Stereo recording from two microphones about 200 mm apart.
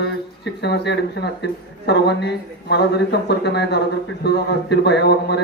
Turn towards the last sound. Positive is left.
turn(degrees=55)  # may be behind; listen again after turning